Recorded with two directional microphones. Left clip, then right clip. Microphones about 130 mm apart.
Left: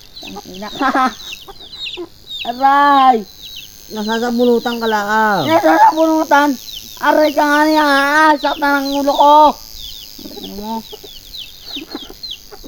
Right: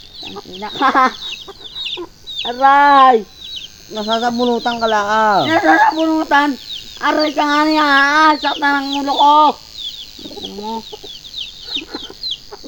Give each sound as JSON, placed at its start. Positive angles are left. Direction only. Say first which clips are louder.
{"t": 0.7, "sound": "speech", "louder": "right 2 dB", "side_deg": 30}
{"t": 3.9, "sound": "speech", "louder": "right 1 dB", "side_deg": 90}
{"t": 5.5, "sound": "a child's voice", "louder": "left 2 dB", "side_deg": 45}
{"t": 10.5, "sound": "chicken", "louder": "left 1 dB", "side_deg": 20}